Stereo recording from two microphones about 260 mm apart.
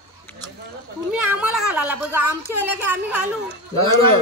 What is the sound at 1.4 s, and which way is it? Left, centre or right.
A man's voice, centre.